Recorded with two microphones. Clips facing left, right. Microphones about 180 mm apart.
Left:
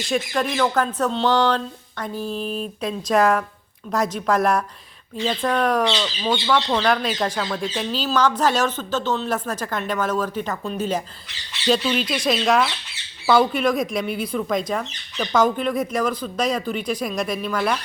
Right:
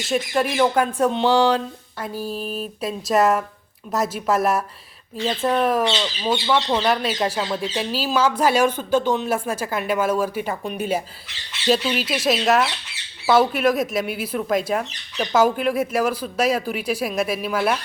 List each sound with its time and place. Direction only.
0.1 s speech: 10° right (ahead or behind)
5.4 s speech: 25° right (ahead or behind)
5.6 s speech: 5° right (ahead or behind)
6.8 s speech: 5° right (ahead or behind)